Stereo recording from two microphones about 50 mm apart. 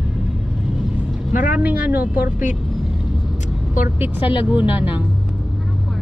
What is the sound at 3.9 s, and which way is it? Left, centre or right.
Speech, right.